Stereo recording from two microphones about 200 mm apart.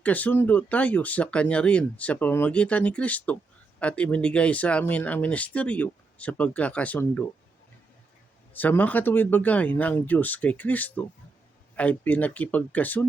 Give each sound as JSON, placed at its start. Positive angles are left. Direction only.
{"t": 0.0, "sound": "speech", "side_deg": 10}
{"t": 8.5, "sound": "speech", "side_deg": 10}